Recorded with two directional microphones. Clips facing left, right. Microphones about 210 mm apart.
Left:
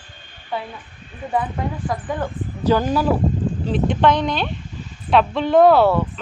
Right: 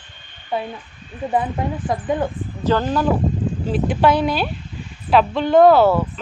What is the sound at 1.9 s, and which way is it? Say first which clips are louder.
Speech: right 5 dB; 15° right (ahead or behind).